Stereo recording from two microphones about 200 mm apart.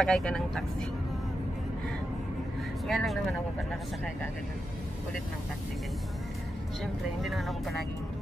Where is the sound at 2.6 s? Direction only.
Centre (ahead or behind).